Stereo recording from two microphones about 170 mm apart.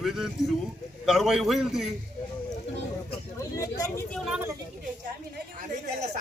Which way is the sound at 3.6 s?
20° left (ahead or behind).